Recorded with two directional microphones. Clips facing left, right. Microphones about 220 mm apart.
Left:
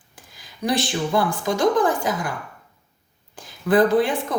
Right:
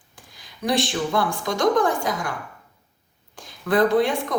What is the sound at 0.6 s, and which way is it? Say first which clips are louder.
Speech: even; centre (ahead or behind).